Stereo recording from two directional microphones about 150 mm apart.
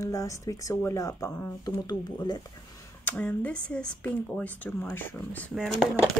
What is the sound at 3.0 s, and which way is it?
Speech, 10° left (ahead or behind).